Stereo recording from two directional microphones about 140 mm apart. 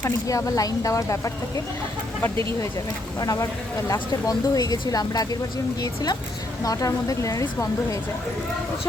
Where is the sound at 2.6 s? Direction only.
25° left (ahead or behind).